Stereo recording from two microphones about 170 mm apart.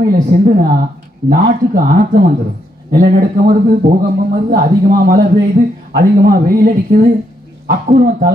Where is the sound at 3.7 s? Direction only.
55° right (ahead or behind).